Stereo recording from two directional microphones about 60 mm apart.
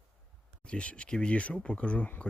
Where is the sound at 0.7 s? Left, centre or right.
Centre.